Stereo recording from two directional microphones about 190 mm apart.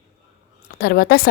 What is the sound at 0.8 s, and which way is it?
Speech, 50° left (ahead or behind).